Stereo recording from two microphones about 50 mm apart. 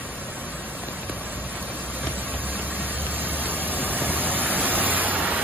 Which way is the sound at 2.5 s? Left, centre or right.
Right.